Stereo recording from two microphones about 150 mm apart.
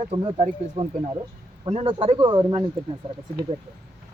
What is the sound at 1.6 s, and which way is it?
Speech, 40° right (ahead or behind).